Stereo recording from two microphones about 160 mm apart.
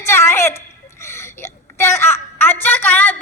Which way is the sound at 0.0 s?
15° left (ahead or behind).